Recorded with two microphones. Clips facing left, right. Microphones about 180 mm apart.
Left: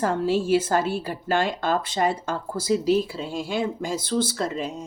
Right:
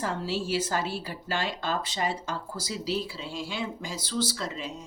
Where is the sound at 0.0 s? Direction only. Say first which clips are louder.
Left 8 dB; 50° left (ahead or behind).